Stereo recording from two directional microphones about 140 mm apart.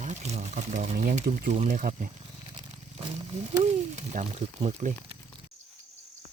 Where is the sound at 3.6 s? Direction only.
55° right (ahead or behind).